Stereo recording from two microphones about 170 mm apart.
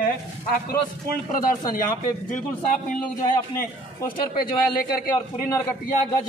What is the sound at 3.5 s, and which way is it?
A man's voice, 60° left (ahead or behind).